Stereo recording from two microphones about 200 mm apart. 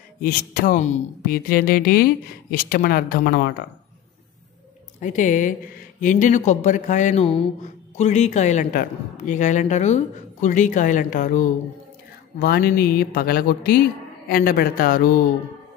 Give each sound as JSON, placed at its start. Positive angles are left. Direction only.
{"t": 0.2, "sound": "speech", "side_deg": 45}
{"t": 5.0, "sound": "speech", "side_deg": 40}
{"t": 12.4, "sound": "speech", "side_deg": 50}